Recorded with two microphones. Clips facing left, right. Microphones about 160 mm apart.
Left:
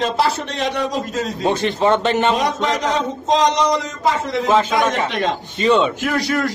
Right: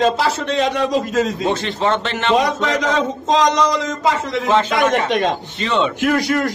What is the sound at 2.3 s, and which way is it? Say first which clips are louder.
A man's voice: right 2 dB; 90° right.